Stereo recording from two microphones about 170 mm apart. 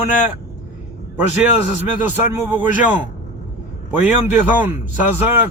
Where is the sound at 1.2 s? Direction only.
10° right (ahead or behind).